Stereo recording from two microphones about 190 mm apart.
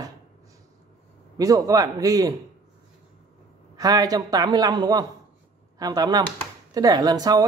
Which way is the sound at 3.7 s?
20° right (ahead or behind).